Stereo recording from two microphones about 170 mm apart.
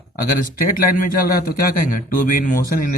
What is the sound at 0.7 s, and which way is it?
A man's voice, 55° left (ahead or behind).